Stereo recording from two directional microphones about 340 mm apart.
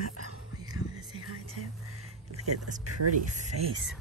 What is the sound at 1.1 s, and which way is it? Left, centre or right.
Music, right.